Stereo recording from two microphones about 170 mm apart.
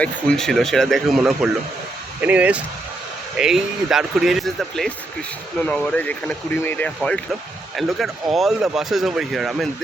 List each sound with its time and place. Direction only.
0.0 s speech: 5° left (ahead or behind)